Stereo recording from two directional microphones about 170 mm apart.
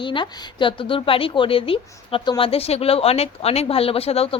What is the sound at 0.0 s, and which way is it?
A woman's voice, 30° left (ahead or behind).